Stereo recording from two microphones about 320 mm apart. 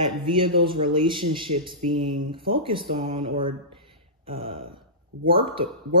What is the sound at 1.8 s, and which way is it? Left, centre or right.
Speech, right.